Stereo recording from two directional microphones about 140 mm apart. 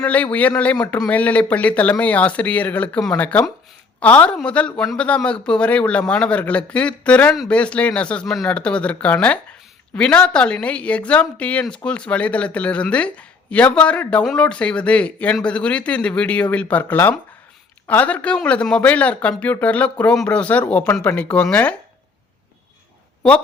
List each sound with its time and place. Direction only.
0.0 s speech: 10° left (ahead or behind)